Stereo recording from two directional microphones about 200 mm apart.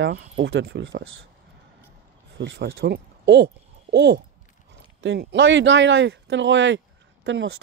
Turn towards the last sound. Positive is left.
turn(degrees=-65)  # may be behind; listen again after turning